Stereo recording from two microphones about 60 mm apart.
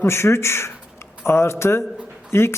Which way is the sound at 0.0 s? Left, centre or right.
Left.